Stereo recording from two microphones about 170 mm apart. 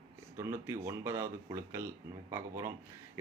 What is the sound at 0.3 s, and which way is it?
A man's voice, 15° right (ahead or behind).